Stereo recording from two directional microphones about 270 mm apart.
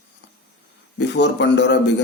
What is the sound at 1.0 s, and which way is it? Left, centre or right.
Speech, left.